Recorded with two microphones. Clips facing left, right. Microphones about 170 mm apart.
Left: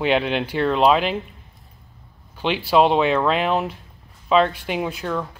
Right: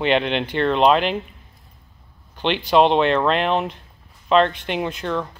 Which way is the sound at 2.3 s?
5° left (ahead or behind).